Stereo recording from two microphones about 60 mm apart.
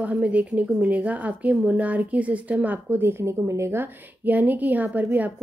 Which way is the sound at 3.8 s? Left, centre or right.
Right.